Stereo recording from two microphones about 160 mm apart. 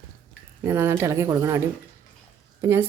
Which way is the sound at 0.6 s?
15° right (ahead or behind).